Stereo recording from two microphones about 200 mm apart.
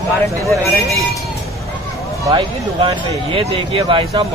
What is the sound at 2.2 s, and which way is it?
Speech, 25° right (ahead or behind).